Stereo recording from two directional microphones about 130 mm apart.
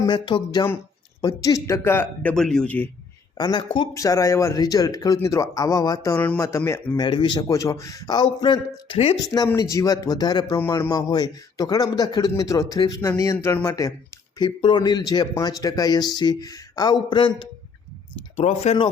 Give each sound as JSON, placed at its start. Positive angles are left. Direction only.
{"t": 0.0, "sound": "speech", "side_deg": 35}
{"t": 2.3, "sound": "speech", "side_deg": 5}
{"t": 3.3, "sound": "speech", "side_deg": 35}
{"t": 3.9, "sound": "speech", "side_deg": 25}
{"t": 6.9, "sound": "speech", "side_deg": 35}
{"t": 9.6, "sound": "speech", "side_deg": 25}
{"t": 14.3, "sound": "speech", "side_deg": 35}
{"t": 18.3, "sound": "speech", "side_deg": 55}